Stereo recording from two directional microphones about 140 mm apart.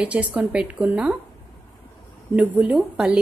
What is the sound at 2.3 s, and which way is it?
Speech, 10° right (ahead or behind).